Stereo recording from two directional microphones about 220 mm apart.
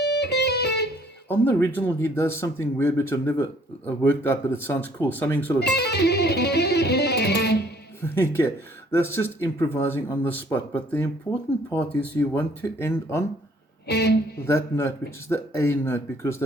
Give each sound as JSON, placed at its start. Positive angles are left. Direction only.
{"t": 0.0, "sound": "music", "side_deg": 50}
{"t": 1.3, "sound": "speech", "side_deg": 10}
{"t": 5.5, "sound": "music", "side_deg": 50}
{"t": 8.0, "sound": "speech", "side_deg": 10}
{"t": 13.8, "sound": "speech", "side_deg": 50}
{"t": 14.4, "sound": "speech", "side_deg": 10}